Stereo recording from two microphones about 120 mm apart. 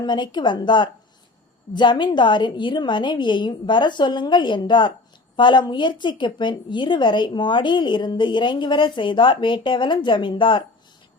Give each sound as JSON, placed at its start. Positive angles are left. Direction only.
{"t": 0.0, "sound": "a woman's voice", "side_deg": 40}